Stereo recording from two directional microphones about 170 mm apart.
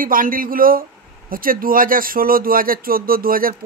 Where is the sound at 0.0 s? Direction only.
55° right (ahead or behind).